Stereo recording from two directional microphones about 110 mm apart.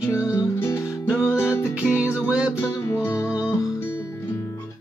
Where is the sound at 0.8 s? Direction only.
5° right (ahead or behind).